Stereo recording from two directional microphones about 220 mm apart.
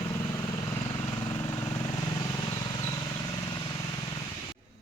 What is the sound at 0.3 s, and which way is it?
Vehicle, 20° left (ahead or behind).